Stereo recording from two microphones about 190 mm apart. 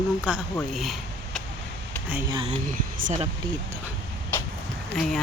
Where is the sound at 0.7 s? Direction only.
Centre (ahead or behind).